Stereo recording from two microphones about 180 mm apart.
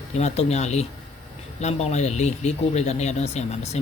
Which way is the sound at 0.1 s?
40° left (ahead or behind).